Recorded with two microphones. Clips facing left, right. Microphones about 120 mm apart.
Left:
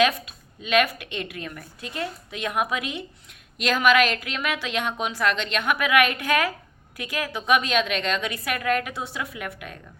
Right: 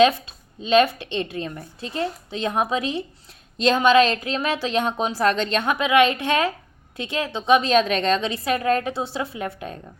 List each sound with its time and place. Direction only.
0.0 s a woman's voice: 30° right (ahead or behind)